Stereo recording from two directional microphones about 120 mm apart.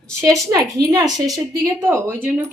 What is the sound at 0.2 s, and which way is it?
A woman's voice, 30° right (ahead or behind).